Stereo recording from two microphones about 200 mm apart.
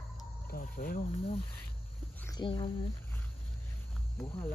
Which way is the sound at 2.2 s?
20° left (ahead or behind).